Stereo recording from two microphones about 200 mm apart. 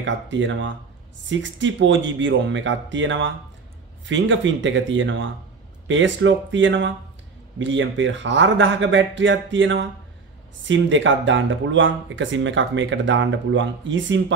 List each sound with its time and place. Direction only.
0.0 s speech: 65° right (ahead or behind)